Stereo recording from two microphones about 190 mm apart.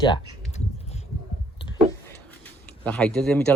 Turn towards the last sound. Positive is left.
turn(degrees=5)  # may be behind; listen again after turning